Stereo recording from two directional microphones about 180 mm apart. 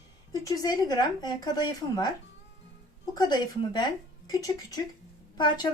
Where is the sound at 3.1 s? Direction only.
20° left (ahead or behind).